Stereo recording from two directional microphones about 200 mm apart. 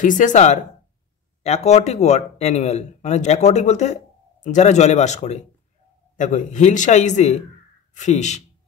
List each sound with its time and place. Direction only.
0.0 s speech: 40° left (ahead or behind)